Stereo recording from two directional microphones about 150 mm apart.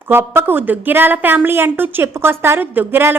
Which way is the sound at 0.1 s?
15° right (ahead or behind).